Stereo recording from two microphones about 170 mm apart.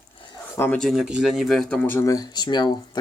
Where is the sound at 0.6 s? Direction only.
5° left (ahead or behind); by 3.0 s 25° left (ahead or behind).